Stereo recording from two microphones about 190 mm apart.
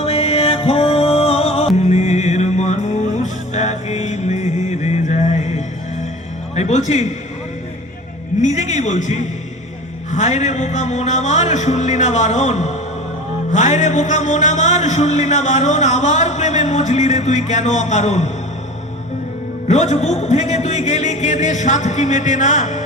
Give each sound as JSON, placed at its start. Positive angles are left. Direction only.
{"t": 0.0, "sound": "music", "side_deg": 30}
{"t": 8.4, "sound": "music", "side_deg": 40}
{"t": 19.6, "sound": "music", "side_deg": 35}